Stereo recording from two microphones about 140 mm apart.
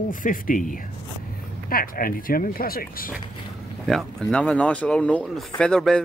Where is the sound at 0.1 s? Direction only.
75° left (ahead or behind).